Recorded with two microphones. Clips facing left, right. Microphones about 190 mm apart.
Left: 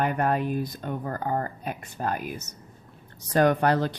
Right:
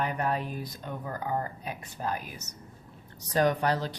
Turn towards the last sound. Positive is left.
turn(degrees=55)  # may be behind; listen again after turning